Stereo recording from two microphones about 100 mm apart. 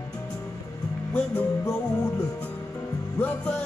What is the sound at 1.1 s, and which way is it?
Music, 20° left (ahead or behind).